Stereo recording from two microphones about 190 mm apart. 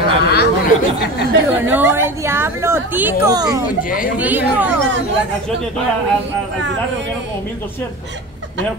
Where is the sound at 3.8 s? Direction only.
45° left (ahead or behind).